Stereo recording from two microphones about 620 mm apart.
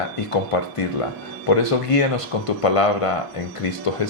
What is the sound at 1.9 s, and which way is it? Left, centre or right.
Speech, left.